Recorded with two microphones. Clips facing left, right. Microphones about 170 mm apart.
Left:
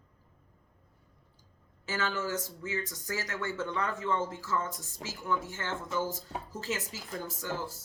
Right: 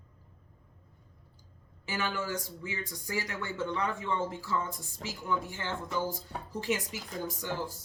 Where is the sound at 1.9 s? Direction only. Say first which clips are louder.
Left 1 dB; 15° right (ahead or behind).